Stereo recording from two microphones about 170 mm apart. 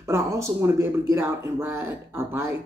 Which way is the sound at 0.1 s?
15° right (ahead or behind).